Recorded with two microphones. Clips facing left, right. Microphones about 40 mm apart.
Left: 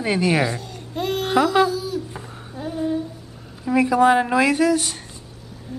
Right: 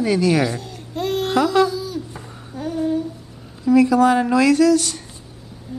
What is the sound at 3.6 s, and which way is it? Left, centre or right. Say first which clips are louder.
Speech: right 2 dB; left.